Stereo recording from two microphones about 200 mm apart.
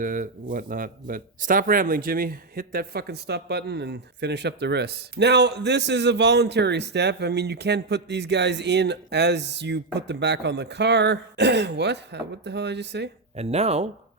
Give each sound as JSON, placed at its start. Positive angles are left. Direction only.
{"t": 0.0, "sound": "speech", "side_deg": -40}
{"t": 13.3, "sound": "speech", "side_deg": -30}